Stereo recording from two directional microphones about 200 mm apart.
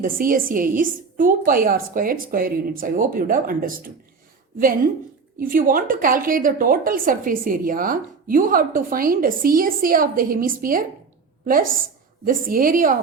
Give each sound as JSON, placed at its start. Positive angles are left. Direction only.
{"t": 0.0, "sound": "a woman's voice", "side_deg": -45}
{"t": 5.4, "sound": "a woman's voice", "side_deg": -45}